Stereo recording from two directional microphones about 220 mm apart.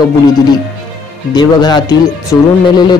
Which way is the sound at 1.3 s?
20° left (ahead or behind).